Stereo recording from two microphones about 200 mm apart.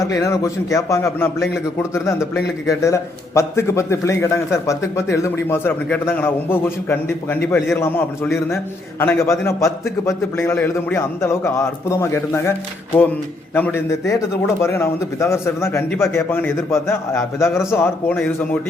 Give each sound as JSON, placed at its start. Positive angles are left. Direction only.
{"t": 0.0, "sound": "a man's voice", "side_deg": 15}